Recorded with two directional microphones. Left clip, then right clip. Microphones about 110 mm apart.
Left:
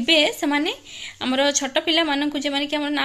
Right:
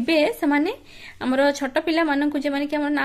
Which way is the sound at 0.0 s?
45° right (ahead or behind).